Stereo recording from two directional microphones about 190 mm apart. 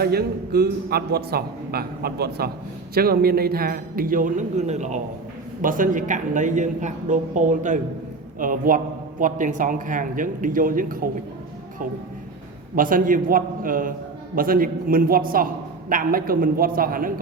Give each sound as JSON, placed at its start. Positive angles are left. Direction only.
{"t": 0.0, "sound": "a man's voice", "side_deg": -55}
{"t": 12.7, "sound": "a man's voice", "side_deg": -45}